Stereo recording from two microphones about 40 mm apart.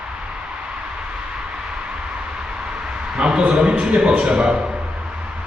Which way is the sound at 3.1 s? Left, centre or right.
Right.